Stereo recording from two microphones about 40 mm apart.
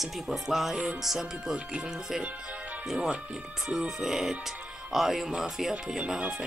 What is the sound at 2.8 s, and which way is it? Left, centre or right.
Speech, centre.